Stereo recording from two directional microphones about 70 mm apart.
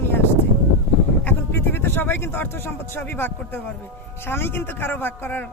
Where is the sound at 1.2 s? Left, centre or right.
Left.